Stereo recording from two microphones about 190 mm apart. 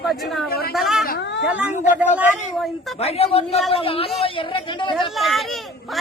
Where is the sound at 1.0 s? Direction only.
50° left (ahead or behind).